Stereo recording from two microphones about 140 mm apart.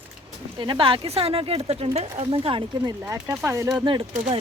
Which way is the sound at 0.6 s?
40° right (ahead or behind).